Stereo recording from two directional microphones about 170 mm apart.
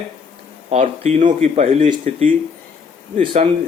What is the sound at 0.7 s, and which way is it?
Speech, 40° right (ahead or behind).